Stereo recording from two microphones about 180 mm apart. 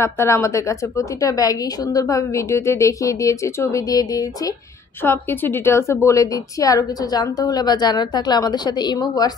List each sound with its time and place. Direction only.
0.0 s a woman's voice: 15° left (ahead or behind)